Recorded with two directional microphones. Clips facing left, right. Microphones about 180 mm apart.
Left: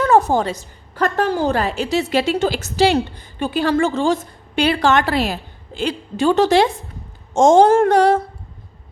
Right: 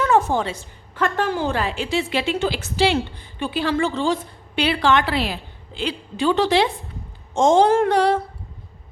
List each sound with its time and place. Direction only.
0.0 s a woman's voice: 40° left (ahead or behind)